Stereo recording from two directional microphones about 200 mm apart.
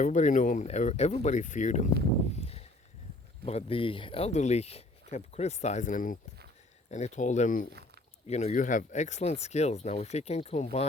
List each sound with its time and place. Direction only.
0.0 s speech: 40° left (ahead or behind)
2.3 s a sound: 30° left (ahead or behind)
3.4 s speech: 30° left (ahead or behind)